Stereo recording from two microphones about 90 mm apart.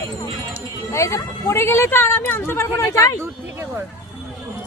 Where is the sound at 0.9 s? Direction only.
35° left (ahead or behind).